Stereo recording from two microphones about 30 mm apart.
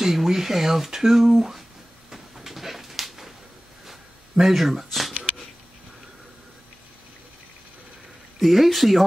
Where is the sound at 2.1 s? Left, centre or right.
Centre.